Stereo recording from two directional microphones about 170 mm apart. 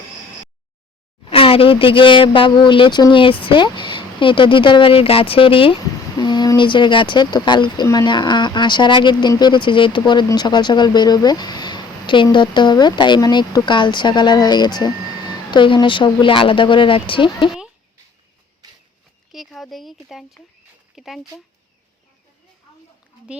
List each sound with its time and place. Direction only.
1.2 s speech: 35° left (ahead or behind)
19.3 s speech: centre (ahead or behind)